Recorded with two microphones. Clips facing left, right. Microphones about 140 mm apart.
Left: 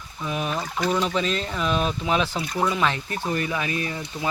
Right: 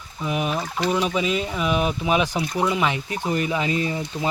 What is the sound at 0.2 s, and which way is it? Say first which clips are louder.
Speech: right 3 dB; 15° right (ahead or behind).